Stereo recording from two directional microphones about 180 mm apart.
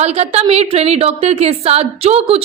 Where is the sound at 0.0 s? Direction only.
35° right (ahead or behind).